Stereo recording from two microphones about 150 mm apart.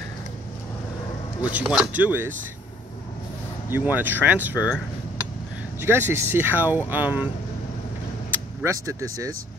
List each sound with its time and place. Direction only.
1.4 s speech: 10° right (ahead or behind)
3.7 s speech: 10° right (ahead or behind)
8.3 s speech: 20° right (ahead or behind)